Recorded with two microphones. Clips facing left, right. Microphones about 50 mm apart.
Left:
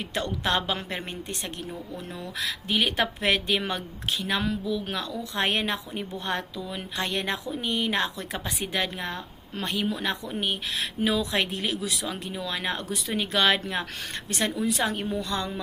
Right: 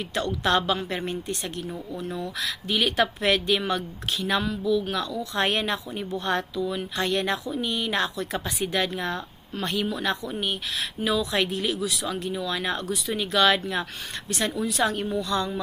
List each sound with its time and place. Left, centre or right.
0.1 s a woman's voice: centre
12.9 s a woman's voice: left; by 15.2 s centre
15.2 s speech: left